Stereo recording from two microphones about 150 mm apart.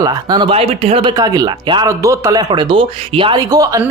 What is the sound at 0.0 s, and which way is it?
Speech, 30° right (ahead or behind).